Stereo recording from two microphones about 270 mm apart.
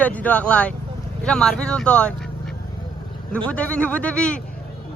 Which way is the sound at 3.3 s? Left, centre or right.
Centre.